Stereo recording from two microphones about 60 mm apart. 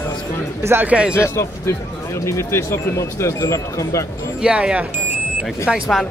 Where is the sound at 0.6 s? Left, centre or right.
Right.